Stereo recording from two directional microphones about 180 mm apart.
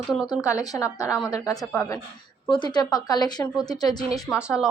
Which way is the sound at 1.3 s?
20° left (ahead or behind).